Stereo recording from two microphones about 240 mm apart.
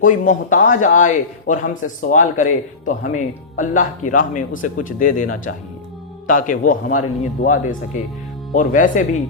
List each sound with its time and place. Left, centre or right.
0.0 s a man's voice: left